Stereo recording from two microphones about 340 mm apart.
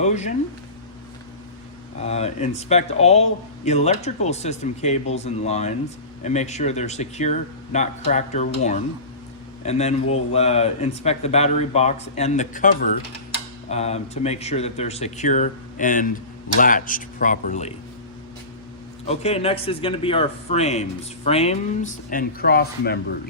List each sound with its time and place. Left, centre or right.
0.0 s speech: centre
2.0 s speech: centre
9.6 s speech: centre
19.0 s speech: centre